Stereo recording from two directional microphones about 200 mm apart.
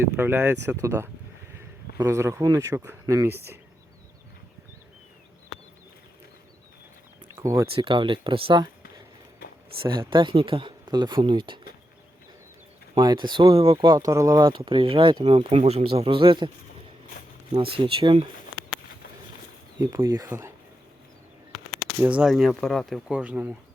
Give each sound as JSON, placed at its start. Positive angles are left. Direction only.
{"t": 0.2, "sound": "speech", "side_deg": -10}
{"t": 7.3, "sound": "speech", "side_deg": -15}
{"t": 10.0, "sound": "speech", "side_deg": -25}
{"t": 13.0, "sound": "speech", "side_deg": -20}
{"t": 17.5, "sound": "speech", "side_deg": -25}
{"t": 19.8, "sound": "speech", "side_deg": -15}
{"t": 21.7, "sound": "speech", "side_deg": -5}